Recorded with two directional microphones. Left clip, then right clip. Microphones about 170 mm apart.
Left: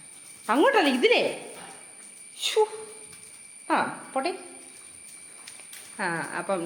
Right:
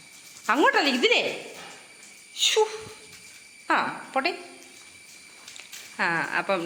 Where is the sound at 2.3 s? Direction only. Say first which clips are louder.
Right 6 dB; 10° left (ahead or behind).